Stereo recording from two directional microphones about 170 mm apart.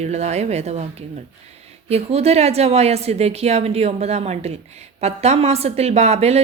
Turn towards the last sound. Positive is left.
turn(degrees=-40)  # may be behind; listen again after turning